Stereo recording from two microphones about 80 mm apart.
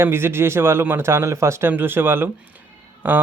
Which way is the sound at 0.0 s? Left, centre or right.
Right.